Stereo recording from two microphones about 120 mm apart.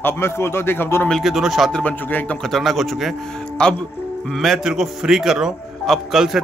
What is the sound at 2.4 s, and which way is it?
A man's voice, centre (ahead or behind).